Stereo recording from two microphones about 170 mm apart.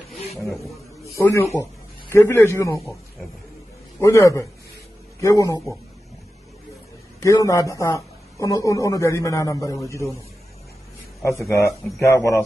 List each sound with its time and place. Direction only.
1.1 s a man's voice: 15° left (ahead or behind)
4.0 s a man's voice: 20° left (ahead or behind)
7.2 s a man's voice: 20° left (ahead or behind)
11.2 s a man's voice: 15° left (ahead or behind)